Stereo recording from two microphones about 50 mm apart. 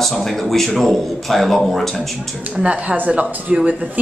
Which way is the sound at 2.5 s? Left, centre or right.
Right.